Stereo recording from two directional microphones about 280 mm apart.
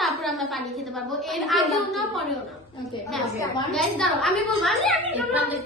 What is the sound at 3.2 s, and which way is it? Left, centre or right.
Speech, centre.